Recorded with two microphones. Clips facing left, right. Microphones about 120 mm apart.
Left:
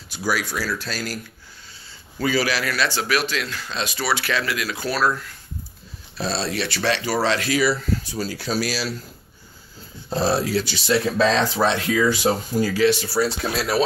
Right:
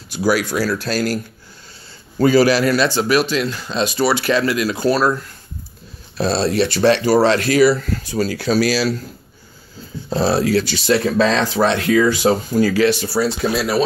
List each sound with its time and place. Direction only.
0.1 s speech: 65° right (ahead or behind)
2.1 s speech: 45° right (ahead or behind)
2.5 s speech: 35° right (ahead or behind)
6.1 s speech: 55° right (ahead or behind)
8.1 s speech: 75° right (ahead or behind); by 8.9 s 90° right
10.3 s speech: 70° right (ahead or behind)
13.1 s speech: 5° right (ahead or behind)